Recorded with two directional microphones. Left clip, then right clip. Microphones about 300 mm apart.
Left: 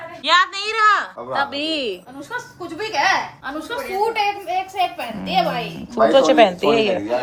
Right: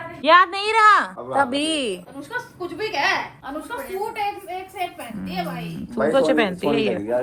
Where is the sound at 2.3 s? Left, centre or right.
Left.